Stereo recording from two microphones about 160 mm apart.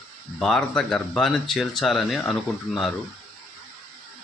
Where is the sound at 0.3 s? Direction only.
5° left (ahead or behind).